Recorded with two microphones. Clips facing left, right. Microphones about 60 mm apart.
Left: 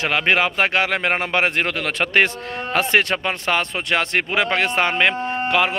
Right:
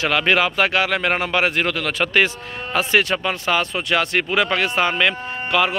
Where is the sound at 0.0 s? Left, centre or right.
Left.